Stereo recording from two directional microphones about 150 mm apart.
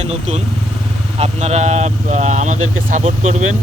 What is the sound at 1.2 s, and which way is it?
Speech, 45° right (ahead or behind).